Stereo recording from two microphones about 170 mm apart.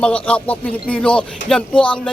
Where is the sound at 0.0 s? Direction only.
5° left (ahead or behind).